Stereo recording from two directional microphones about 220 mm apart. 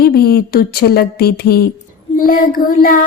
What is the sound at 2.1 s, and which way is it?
Child singing, 40° left (ahead or behind).